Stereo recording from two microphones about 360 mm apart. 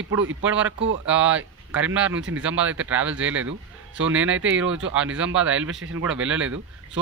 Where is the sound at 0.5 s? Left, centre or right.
Centre.